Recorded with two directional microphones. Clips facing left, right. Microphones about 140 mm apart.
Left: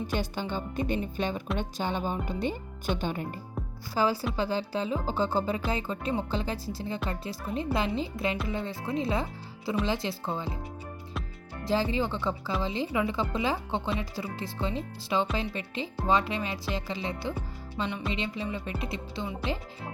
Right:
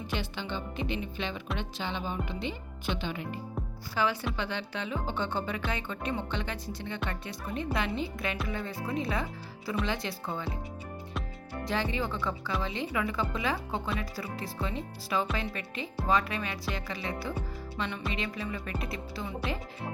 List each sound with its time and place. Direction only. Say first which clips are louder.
0.1 s speech: left 4 dB; 40° left (ahead or behind)
11.6 s speech: left 4 dB; 30° left (ahead or behind)